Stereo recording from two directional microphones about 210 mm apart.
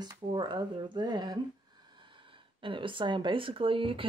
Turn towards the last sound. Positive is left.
turn(degrees=-25)  # may be behind; listen again after turning